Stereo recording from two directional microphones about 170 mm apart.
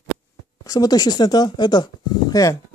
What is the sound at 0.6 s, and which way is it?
Speech, 20° left (ahead or behind).